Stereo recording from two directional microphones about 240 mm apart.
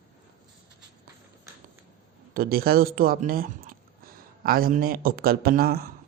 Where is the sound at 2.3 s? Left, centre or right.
Right.